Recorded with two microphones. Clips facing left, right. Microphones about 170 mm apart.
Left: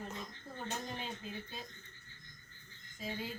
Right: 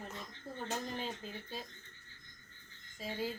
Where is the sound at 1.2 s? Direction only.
40° right (ahead or behind).